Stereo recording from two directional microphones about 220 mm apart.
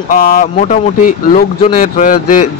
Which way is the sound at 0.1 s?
40° left (ahead or behind).